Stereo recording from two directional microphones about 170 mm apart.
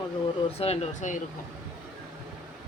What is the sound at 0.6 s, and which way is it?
Speech, 40° left (ahead or behind).